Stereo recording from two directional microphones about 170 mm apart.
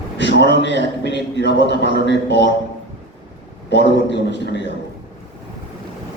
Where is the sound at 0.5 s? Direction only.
90° left.